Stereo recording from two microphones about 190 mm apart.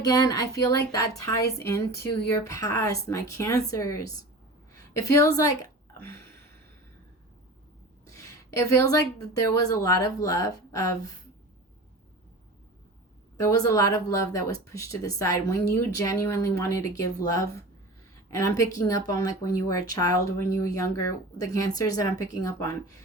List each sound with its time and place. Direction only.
0.0 s speech: 20° left (ahead or behind)
4.7 s a sound: 15° left (ahead or behind)
5.4 s speech: 20° left (ahead or behind)
8.0 s a sound: 15° left (ahead or behind)
9.6 s speech: 20° left (ahead or behind)
13.3 s speech: 20° left (ahead or behind)